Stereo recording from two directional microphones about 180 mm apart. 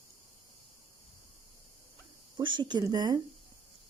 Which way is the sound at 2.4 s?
25° right (ahead or behind).